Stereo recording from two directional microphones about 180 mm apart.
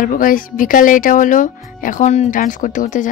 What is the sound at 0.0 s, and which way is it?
Speech, 50° left (ahead or behind).